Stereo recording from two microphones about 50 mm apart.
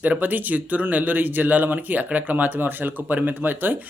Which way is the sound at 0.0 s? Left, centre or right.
Right.